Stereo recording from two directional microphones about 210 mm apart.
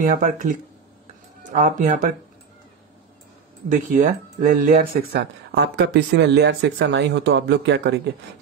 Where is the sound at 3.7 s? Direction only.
40° right (ahead or behind).